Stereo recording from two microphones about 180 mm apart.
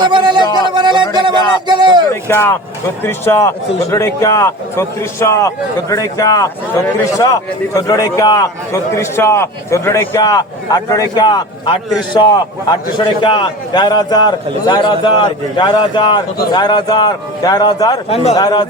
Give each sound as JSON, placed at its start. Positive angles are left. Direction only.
{"t": 0.0, "sound": "a sound", "side_deg": -25}
{"t": 0.4, "sound": "music", "side_deg": 25}
{"t": 0.7, "sound": "a sound", "side_deg": -25}
{"t": 2.2, "sound": "a man's voice", "side_deg": 15}
{"t": 18.1, "sound": "speech", "side_deg": 35}
{"t": 18.3, "sound": "a man's voice", "side_deg": 20}